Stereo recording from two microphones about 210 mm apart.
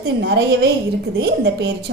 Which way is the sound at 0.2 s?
55° right (ahead or behind).